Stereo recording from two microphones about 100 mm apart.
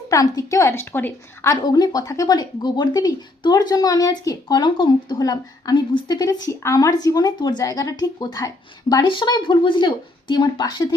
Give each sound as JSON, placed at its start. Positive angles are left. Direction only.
{"t": 0.1, "sound": "a woman's voice", "side_deg": 35}
{"t": 1.6, "sound": "speech", "side_deg": 40}
{"t": 9.0, "sound": "speech", "side_deg": 55}